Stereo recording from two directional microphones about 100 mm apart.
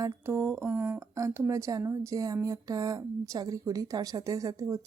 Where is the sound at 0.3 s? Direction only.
25° right (ahead or behind).